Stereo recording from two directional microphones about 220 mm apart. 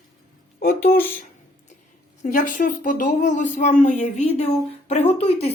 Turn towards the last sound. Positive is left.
turn(degrees=25)  # may be behind; listen again after turning